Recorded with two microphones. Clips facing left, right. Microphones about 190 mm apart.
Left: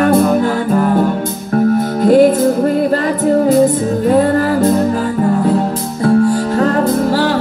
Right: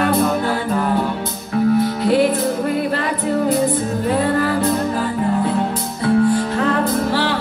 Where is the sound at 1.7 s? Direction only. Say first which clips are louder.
Left 8 dB; 45° left (ahead or behind).